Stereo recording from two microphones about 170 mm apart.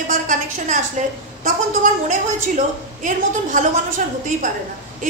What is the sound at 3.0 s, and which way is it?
Speech, 45° right (ahead or behind).